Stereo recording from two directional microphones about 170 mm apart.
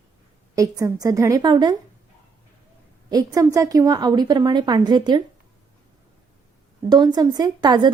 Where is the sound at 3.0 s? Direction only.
20° right (ahead or behind).